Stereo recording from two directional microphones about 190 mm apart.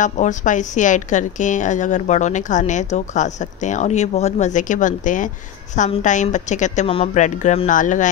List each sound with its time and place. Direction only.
0.0 s a woman's voice: 40° left (ahead or behind)